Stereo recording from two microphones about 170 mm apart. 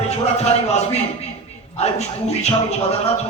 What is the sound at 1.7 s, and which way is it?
A man's voice, 40° left (ahead or behind).